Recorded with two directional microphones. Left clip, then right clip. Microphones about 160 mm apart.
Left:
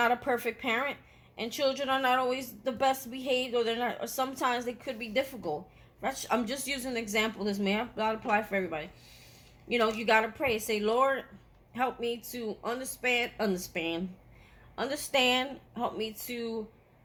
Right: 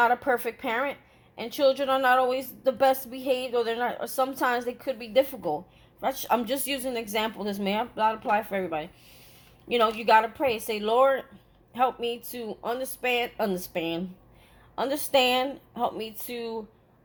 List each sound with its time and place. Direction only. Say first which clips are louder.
0.0 s a woman's voice: right 5 dB; 30° right (ahead or behind)